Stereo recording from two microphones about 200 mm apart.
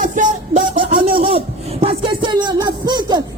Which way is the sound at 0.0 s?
40° right (ahead or behind).